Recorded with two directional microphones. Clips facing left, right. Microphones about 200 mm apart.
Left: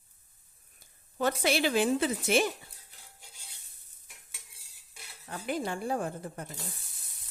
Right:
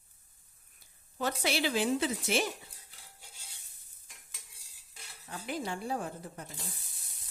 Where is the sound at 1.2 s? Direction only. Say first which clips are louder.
Left 4 dB; 55° left (ahead or behind).